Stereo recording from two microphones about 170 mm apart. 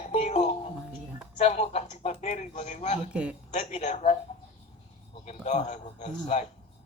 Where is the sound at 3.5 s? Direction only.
45° left (ahead or behind).